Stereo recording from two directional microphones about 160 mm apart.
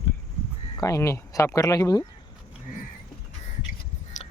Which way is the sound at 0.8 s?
20° left (ahead or behind).